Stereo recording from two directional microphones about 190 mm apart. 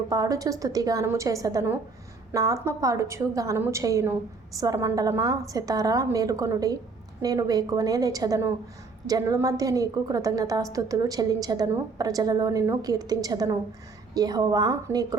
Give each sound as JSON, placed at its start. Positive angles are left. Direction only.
{"t": 0.1, "sound": "a woman's voice", "side_deg": -20}